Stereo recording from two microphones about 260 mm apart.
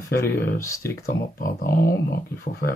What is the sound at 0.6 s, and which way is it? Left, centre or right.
Speech, centre.